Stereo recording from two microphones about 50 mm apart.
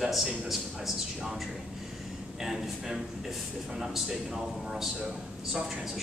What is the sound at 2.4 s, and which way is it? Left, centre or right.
A man's voice, centre.